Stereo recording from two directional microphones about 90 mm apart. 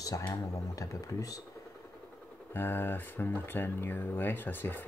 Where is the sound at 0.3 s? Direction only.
40° left (ahead or behind).